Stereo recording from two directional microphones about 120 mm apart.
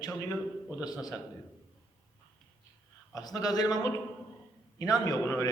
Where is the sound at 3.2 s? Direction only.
30° left (ahead or behind).